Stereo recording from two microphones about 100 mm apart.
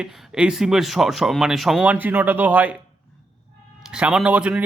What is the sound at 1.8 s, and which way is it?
Speech, 15° right (ahead or behind).